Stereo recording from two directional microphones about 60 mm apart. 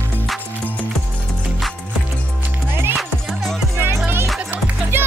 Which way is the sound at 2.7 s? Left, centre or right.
Right.